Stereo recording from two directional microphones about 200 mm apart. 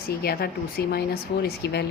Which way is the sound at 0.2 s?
50° left (ahead or behind).